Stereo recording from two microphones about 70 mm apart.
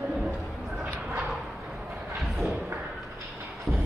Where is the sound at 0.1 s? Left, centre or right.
Centre.